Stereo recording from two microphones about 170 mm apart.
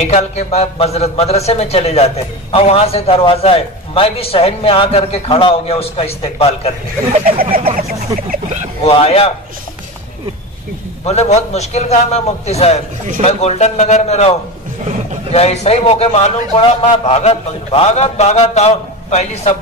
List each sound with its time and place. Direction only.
0.0 s a man's voice: 40° left (ahead or behind)
8.3 s speech: 45° right (ahead or behind)
8.8 s a man's voice: 35° left (ahead or behind)
11.1 s a man's voice: 40° left (ahead or behind)
15.3 s a man's voice: 40° left (ahead or behind)